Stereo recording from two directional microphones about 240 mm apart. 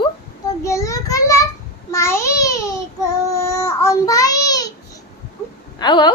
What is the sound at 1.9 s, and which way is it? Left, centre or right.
Speech, centre.